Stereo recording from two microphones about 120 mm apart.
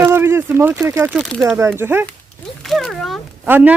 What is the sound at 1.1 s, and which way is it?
Speech, 5° right (ahead or behind).